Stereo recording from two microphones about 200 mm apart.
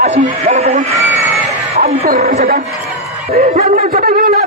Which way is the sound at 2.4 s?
50° right (ahead or behind).